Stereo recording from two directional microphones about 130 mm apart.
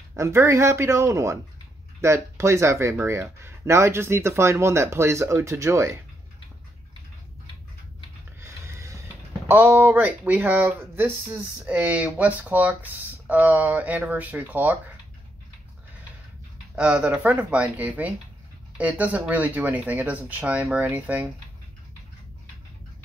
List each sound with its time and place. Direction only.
0.1 s speech: 20° right (ahead or behind)
8.4 s a sound: 20° right (ahead or behind)
9.5 s speech: 15° right (ahead or behind)
16.7 s speech: 10° right (ahead or behind)